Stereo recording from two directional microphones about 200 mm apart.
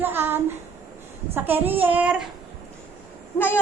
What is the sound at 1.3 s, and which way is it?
Speech, 10° right (ahead or behind).